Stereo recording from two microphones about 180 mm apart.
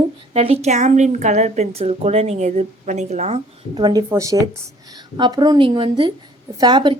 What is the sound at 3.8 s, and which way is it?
A woman's voice, 20° right (ahead or behind).